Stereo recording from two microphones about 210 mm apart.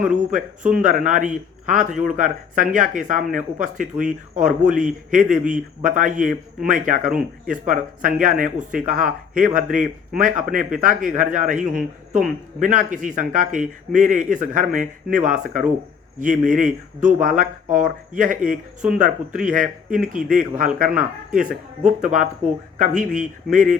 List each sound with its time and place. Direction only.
0.3 s speech: 35° right (ahead or behind)
7.1 s speech: 5° right (ahead or behind)
7.5 s speech: 40° right (ahead or behind)
9.6 s speech: 5° right (ahead or behind)
10.1 s speech: 40° right (ahead or behind)
20.2 s speech: centre (ahead or behind)
20.7 s speech: 40° right (ahead or behind)